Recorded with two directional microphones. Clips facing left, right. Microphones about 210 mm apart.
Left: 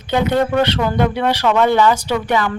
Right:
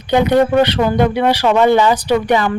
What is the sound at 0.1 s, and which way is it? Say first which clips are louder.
Speech: right 4 dB; 15° right (ahead or behind).